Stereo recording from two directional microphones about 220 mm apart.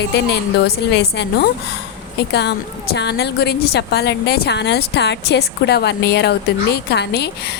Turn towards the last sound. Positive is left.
turn(degrees=50)  # may be behind; listen again after turning